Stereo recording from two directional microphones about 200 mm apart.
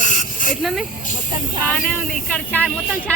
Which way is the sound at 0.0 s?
40° left (ahead or behind).